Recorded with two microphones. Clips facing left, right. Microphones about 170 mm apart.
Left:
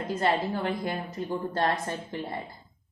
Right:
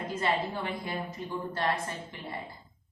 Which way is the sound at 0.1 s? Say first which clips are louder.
Left 4 dB; 45° left (ahead or behind).